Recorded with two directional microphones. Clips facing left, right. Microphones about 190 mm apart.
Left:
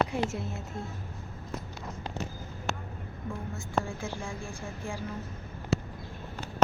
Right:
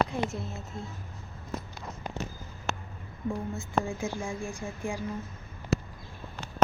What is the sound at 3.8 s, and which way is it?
A woman's voice, 15° right (ahead or behind).